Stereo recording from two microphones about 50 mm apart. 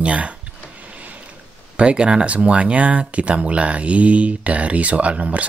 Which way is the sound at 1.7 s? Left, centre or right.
Right.